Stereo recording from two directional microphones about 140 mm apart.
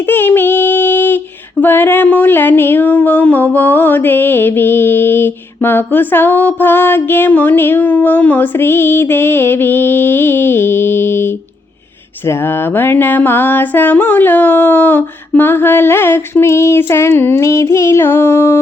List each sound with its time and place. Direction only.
0.0 s female singing: 15° left (ahead or behind)